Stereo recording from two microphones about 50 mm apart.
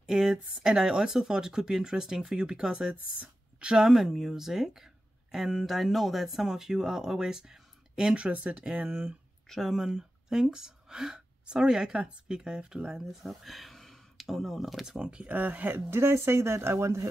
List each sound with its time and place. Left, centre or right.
0.0 s a sound: centre
0.6 s speech: centre
8.3 s speech: right
9.5 s speech: centre
15.0 s speech: right
15.3 s speech: right
15.9 s speech: right